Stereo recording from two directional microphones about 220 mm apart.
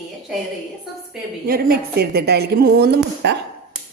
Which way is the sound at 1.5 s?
45° right (ahead or behind).